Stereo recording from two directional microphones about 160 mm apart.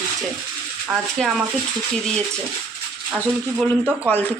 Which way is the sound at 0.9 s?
10° right (ahead or behind).